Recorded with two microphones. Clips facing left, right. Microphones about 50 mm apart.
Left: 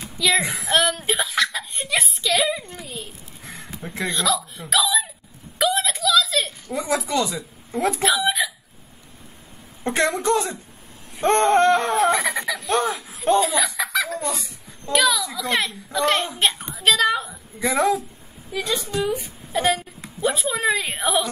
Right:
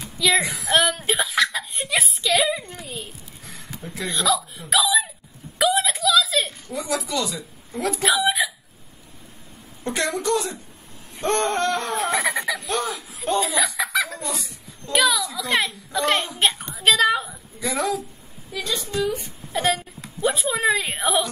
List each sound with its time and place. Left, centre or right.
0.0 s music: centre
0.7 s speech: centre
5.6 s a sound: centre
6.7 s a sound: left
7.1 s speech: left
7.3 s speech: centre
8.4 s chicken: centre
9.8 s speech: left
11.9 s fowl: centre
13.4 s laughter: centre
14.9 s a woman's voice: centre
17.6 s a woman's voice: left
18.9 s a woman's voice: centre